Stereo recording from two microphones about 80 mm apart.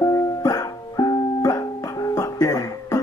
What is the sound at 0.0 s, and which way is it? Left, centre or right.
Music, left.